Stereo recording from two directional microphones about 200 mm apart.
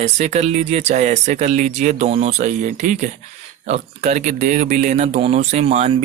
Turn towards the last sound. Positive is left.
turn(degrees=-30)  # may be behind; listen again after turning